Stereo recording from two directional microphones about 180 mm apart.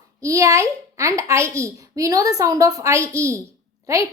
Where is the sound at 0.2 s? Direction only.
15° right (ahead or behind).